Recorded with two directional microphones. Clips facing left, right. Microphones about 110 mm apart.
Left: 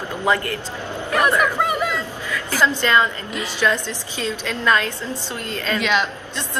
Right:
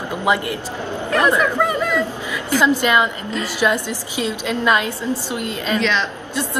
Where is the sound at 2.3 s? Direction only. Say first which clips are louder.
Right 2 dB; 15° right (ahead or behind).